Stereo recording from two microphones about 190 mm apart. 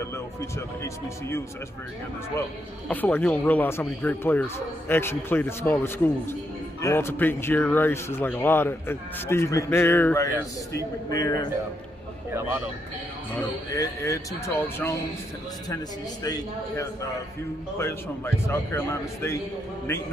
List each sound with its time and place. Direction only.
0.6 s speech: 15° left (ahead or behind)
2.9 s a man's voice: 10° left (ahead or behind)
13.7 s a man's voice: 15° left (ahead or behind)